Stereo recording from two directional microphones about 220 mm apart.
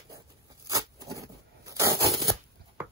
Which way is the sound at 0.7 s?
15° right (ahead or behind).